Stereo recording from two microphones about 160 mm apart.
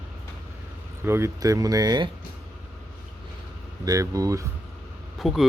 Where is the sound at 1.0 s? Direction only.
15° right (ahead or behind).